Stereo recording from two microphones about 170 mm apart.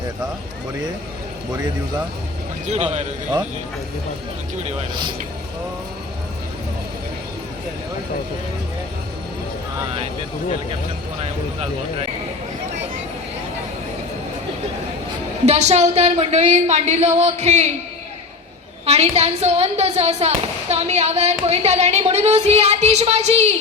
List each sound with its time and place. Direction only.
2.6 s speech: 40° right (ahead or behind)
4.5 s speech: 40° right (ahead or behind)
11.2 s speech: 35° right (ahead or behind)
15.4 s speech: 40° right (ahead or behind)
18.9 s speech: 40° right (ahead or behind)